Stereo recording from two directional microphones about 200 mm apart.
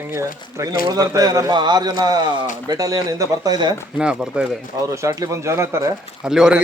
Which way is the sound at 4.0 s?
5° right (ahead or behind).